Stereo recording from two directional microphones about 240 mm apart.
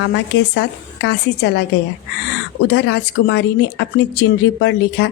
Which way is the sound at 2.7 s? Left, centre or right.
Left.